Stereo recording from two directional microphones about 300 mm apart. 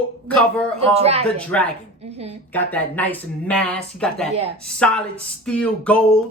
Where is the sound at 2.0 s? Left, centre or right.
Right.